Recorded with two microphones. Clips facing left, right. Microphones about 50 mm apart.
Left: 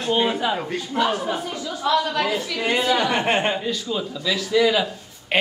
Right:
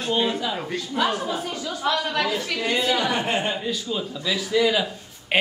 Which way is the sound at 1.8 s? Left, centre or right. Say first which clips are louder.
Left 4 dB; right.